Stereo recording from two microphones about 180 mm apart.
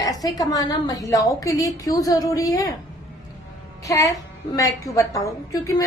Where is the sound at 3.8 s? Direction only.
15° left (ahead or behind).